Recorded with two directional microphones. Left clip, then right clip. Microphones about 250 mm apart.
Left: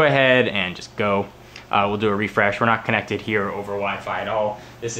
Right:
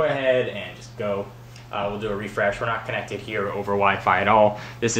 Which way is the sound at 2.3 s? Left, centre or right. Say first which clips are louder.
Left 3 dB; centre.